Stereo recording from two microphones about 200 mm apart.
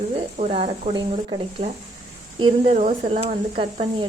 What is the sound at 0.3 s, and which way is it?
Speech, 30° right (ahead or behind).